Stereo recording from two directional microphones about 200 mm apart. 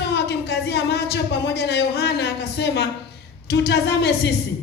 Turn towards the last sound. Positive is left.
turn(degrees=55)  # may be behind; listen again after turning